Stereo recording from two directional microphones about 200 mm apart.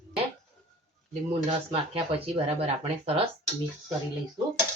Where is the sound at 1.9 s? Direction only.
30° right (ahead or behind).